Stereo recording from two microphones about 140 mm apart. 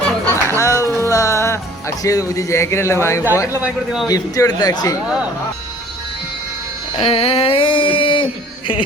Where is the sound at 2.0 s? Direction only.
25° left (ahead or behind).